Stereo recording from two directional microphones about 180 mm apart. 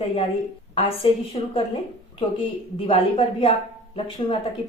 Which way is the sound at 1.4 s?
35° left (ahead or behind).